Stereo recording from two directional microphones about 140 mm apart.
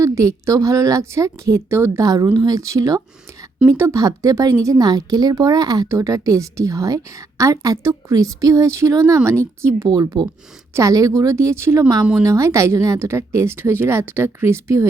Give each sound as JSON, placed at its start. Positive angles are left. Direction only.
{"t": 0.0, "sound": "a woman's voice", "side_deg": -20}